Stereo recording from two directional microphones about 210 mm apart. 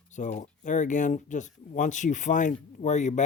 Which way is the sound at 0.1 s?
35° left (ahead or behind).